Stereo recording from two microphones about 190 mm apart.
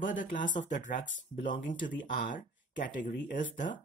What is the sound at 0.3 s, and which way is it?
Speech, 40° left (ahead or behind).